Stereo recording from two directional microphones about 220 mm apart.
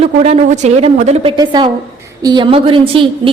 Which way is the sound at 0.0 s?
30° right (ahead or behind).